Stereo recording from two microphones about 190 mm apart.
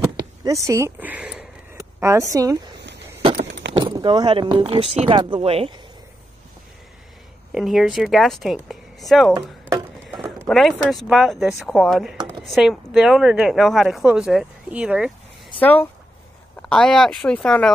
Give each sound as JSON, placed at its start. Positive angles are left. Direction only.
{"t": 0.0, "sound": "a sound", "side_deg": -15}
{"t": 2.3, "sound": "speech", "side_deg": -20}
{"t": 3.7, "sound": "speech", "side_deg": -25}
{"t": 7.5, "sound": "speech", "side_deg": 0}
{"t": 10.4, "sound": "speech", "side_deg": 0}
{"t": 15.6, "sound": "speech", "side_deg": 10}